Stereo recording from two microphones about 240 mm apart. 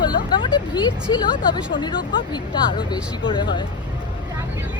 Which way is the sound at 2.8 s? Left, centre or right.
Centre.